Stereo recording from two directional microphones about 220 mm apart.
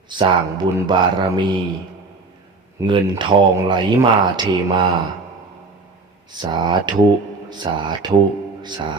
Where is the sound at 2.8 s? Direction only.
20° right (ahead or behind).